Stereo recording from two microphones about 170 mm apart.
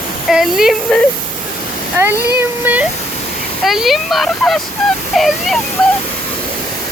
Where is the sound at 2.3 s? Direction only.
10° right (ahead or behind).